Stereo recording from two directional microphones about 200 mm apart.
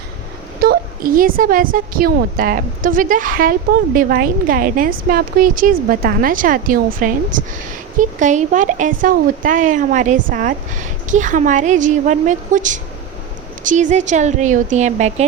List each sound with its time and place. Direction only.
0.6 s a woman's voice: 50° right (ahead or behind)